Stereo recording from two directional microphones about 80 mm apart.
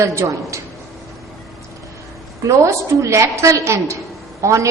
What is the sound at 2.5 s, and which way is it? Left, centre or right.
A woman's voice, right.